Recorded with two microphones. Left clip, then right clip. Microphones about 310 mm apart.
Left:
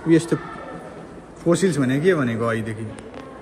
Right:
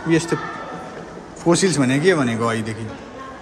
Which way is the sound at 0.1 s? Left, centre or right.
Centre.